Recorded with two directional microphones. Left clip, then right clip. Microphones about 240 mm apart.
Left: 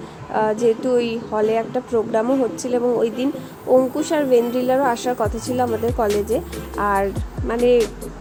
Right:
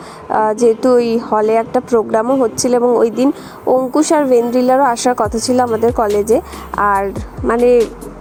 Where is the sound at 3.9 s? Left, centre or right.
Right.